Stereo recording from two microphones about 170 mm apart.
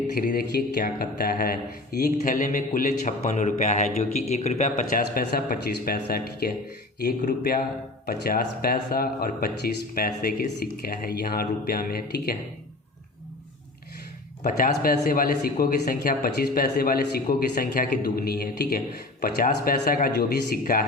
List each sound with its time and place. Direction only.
0.2 s a man's voice: 60° left (ahead or behind); by 4.7 s 40° left (ahead or behind)
4.7 s a man's voice: 55° left (ahead or behind)
14.4 s a man's voice: 55° left (ahead or behind)